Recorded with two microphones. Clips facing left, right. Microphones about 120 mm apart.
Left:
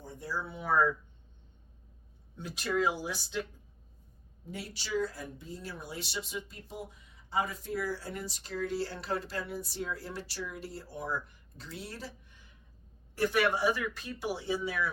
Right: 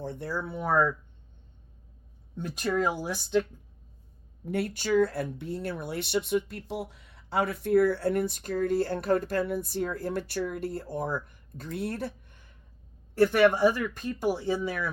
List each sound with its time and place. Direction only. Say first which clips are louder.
0.0 s speech: right 5 dB; 65° right (ahead or behind); by 0.9 s 50° right (ahead or behind)
2.4 s speech: right 3 dB; 45° right (ahead or behind)
4.4 s speech: right 12 dB; 60° right (ahead or behind)